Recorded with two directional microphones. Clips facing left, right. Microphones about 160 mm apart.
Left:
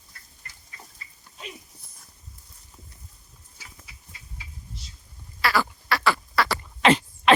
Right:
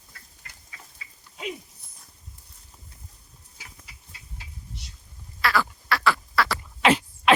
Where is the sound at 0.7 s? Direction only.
90° right.